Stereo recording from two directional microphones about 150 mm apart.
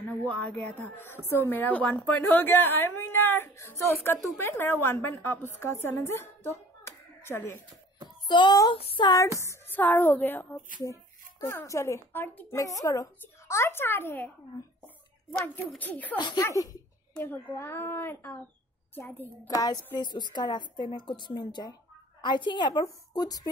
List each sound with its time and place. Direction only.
0.3 s a woman's voice: 10° left (ahead or behind)
8.3 s a woman's voice: 30° left (ahead or behind)
9.4 s speech: 15° left (ahead or behind)
15.4 s speech: 10° left (ahead or behind)
16.2 s a woman's voice: 30° left (ahead or behind)
17.1 s speech: 10° left (ahead or behind)
19.4 s a woman's voice: 25° left (ahead or behind)